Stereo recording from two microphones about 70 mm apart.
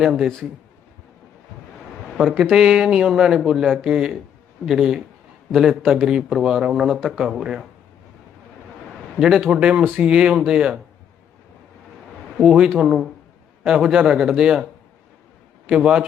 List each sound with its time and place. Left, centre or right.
0.0 s speech: centre
2.2 s a man's voice: centre
9.1 s speech: centre
12.4 s speech: centre
15.7 s speech: centre